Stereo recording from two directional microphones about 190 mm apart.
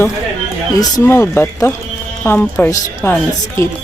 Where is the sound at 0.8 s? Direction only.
15° left (ahead or behind).